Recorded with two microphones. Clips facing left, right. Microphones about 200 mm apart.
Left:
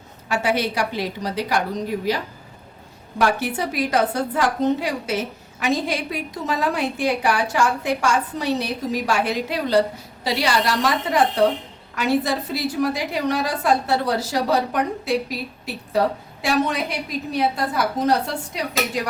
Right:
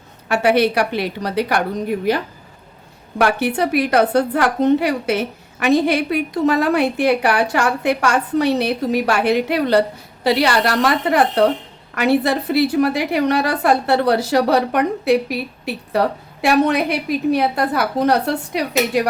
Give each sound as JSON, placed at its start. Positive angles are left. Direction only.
{"t": 0.3, "sound": "a woman's voice", "side_deg": -65}